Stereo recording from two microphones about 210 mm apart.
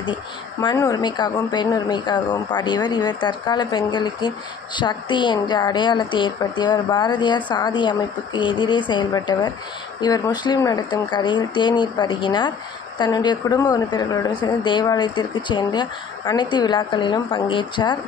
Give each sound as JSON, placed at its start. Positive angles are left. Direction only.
{"t": 0.0, "sound": "speech", "side_deg": 20}